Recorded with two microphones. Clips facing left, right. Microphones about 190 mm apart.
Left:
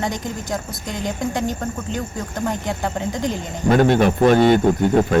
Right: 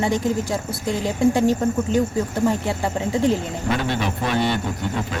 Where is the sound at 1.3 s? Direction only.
35° right (ahead or behind).